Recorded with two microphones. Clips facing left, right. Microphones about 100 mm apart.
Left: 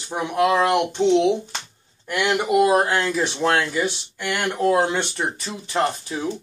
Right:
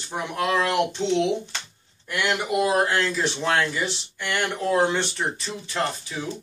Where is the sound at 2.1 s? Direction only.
25° left (ahead or behind).